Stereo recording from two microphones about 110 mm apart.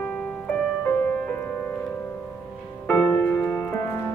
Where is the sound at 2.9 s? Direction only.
15° left (ahead or behind).